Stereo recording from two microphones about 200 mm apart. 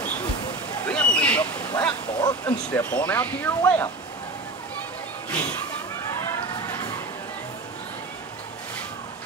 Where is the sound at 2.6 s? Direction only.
5° left (ahead or behind).